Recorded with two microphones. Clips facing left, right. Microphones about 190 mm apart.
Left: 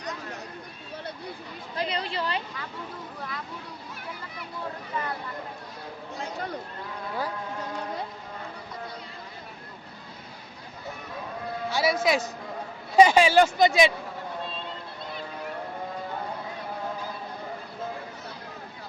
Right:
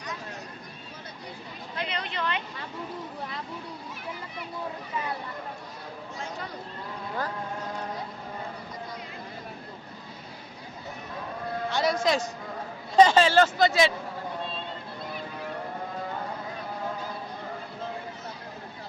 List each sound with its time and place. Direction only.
1.7 s speech: 35° left (ahead or behind)
11.7 s speech: 5° left (ahead or behind)